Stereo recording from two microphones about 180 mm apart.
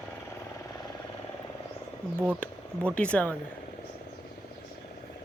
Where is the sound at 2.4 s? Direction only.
5° left (ahead or behind).